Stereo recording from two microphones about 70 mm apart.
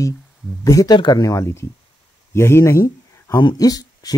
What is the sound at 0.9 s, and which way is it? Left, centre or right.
Speech, left.